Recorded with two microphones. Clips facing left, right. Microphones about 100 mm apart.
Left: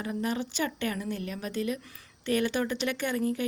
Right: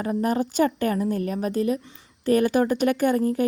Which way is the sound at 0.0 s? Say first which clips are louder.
Right 8 dB; 40° right (ahead or behind).